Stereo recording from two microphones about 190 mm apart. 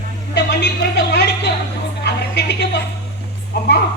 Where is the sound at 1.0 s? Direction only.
60° left (ahead or behind).